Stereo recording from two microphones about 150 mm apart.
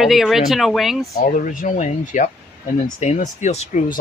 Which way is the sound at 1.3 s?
65° left (ahead or behind).